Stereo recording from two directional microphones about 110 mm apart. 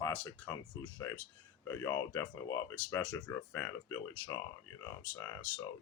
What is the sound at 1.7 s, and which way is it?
Speech, 30° left (ahead or behind).